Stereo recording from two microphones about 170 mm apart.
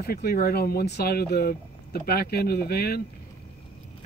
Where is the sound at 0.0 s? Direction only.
65° left (ahead or behind).